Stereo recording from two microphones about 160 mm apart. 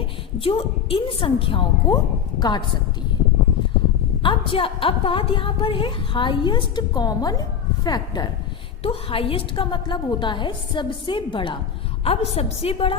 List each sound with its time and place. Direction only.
0.3 s a woman's voice: 35° left (ahead or behind)
4.2 s a woman's voice: 35° left (ahead or behind)
8.8 s a woman's voice: 35° left (ahead or behind)